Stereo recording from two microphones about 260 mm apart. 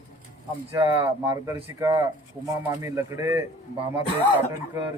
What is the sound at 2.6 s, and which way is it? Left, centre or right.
A man's voice, centre.